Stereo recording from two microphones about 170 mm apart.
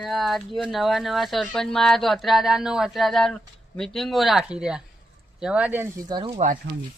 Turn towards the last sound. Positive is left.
turn(degrees=-25)  # may be behind; listen again after turning